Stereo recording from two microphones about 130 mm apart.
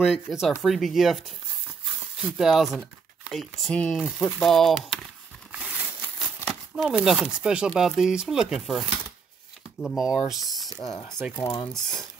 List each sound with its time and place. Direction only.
0.0 s speech: centre (ahead or behind)
2.2 s speech: 5° right (ahead or behind)
5.5 s a sound: 10° right (ahead or behind)
6.8 s speech: 5° right (ahead or behind)
11.4 s speech: 40° left (ahead or behind)
11.7 s speech: 5° left (ahead or behind)